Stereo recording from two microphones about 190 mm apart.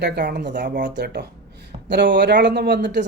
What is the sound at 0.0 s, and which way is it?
Speech, 60° right (ahead or behind).